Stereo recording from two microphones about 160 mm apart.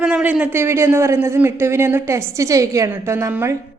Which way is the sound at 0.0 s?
5° right (ahead or behind).